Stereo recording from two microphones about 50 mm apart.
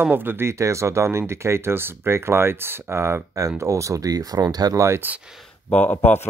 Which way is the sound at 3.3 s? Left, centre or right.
Right.